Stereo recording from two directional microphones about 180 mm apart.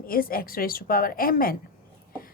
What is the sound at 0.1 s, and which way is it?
A woman's voice, 55° left (ahead or behind).